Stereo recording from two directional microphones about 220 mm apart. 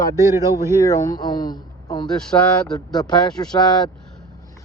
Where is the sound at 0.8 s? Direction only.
15° left (ahead or behind).